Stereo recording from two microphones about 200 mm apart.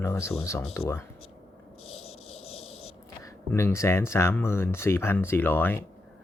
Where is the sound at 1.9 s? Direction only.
30° left (ahead or behind).